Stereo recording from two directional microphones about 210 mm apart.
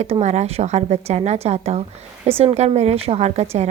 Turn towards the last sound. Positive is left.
turn(degrees=-30)  # may be behind; listen again after turning